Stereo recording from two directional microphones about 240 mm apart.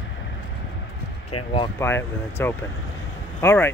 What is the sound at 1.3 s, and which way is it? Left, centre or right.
Speech, left.